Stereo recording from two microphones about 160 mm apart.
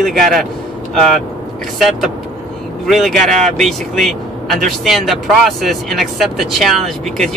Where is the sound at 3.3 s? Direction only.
50° right (ahead or behind).